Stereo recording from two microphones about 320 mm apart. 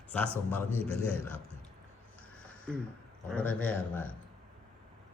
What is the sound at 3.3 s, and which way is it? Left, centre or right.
Speech, centre.